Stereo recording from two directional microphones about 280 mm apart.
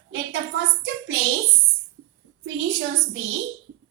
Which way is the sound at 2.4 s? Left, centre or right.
Right.